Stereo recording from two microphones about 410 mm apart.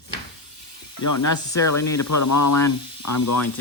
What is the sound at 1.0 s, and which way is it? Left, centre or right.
Speech, left.